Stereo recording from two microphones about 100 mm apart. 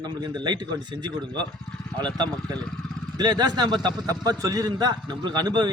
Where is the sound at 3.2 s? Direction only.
40° right (ahead or behind).